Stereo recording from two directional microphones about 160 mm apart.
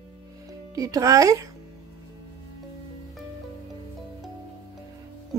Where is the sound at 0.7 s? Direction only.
20° right (ahead or behind).